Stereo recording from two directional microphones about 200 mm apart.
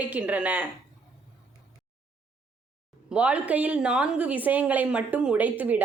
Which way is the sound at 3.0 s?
5° right (ahead or behind).